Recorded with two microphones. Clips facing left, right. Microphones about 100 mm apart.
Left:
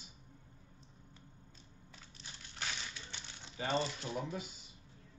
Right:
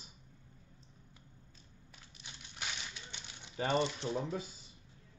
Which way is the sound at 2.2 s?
15° right (ahead or behind).